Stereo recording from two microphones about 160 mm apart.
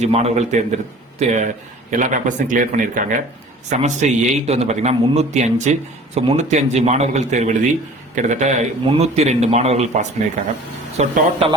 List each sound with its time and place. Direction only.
0.0 s a man's voice: 40° right (ahead or behind)